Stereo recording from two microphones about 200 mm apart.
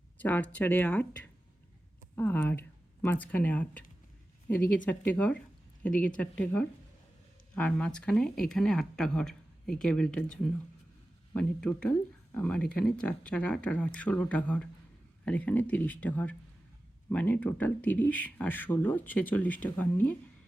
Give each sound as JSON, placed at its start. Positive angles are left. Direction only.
{"t": 0.2, "sound": "speech", "side_deg": 10}